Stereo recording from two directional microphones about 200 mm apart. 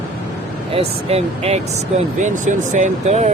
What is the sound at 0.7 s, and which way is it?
Speech, 30° right (ahead or behind).